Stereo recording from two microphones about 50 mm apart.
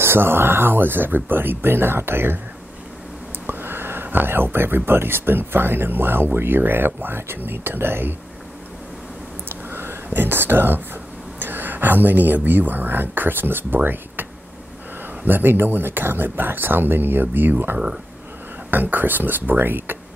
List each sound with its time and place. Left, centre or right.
0.0 s speech: right
3.4 s speech: right
9.5 s a sound: right
10.0 s speech: right
11.3 s a sound: right
12.4 s speech: right
15.2 s speech: right